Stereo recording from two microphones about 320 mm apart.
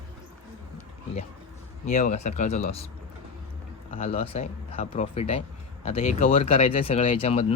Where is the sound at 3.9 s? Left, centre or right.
Centre.